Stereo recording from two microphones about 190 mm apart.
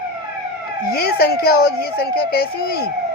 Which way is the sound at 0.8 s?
55° left (ahead or behind).